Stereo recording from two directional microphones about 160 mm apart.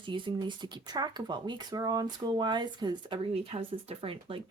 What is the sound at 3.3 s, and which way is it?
Speech, 40° right (ahead or behind).